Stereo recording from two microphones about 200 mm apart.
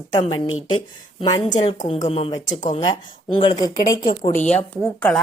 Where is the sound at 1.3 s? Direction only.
20° left (ahead or behind).